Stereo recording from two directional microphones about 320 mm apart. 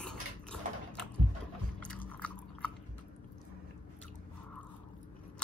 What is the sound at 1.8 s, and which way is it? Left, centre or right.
Chewing, centre.